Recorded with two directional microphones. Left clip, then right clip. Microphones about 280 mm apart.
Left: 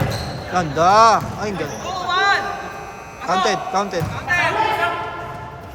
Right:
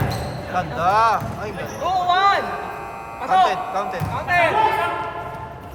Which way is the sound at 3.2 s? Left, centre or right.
Centre.